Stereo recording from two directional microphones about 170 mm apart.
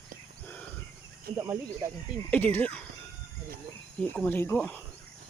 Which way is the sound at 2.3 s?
10° left (ahead or behind).